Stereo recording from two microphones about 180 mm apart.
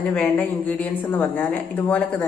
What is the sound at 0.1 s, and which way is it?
Speech, 10° left (ahead or behind).